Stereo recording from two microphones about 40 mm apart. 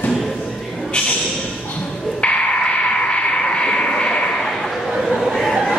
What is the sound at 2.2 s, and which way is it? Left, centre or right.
Radio, left.